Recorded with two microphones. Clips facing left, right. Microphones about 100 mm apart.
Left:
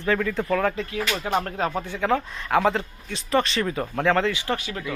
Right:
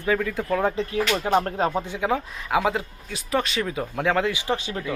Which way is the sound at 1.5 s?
35° right (ahead or behind).